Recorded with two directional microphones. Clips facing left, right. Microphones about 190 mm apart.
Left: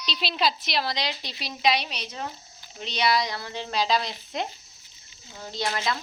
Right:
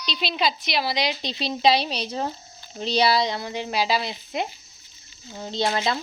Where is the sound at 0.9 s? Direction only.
15° right (ahead or behind).